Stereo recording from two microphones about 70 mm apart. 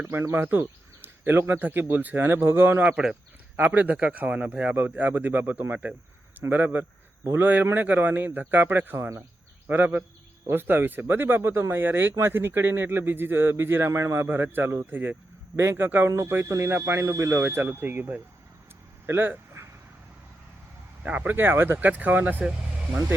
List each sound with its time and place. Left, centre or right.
0.1 s speech: right
2.8 s a man's voice: centre
15.5 s a man's voice: right
19.0 s speech: right
19.6 s a sound: right
21.0 s a man's voice: right